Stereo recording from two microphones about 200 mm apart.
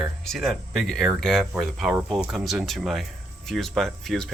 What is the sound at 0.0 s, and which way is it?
Speech, centre (ahead or behind).